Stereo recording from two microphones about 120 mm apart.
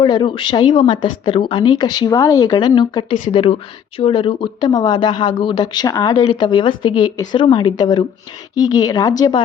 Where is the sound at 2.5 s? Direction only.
40° left (ahead or behind).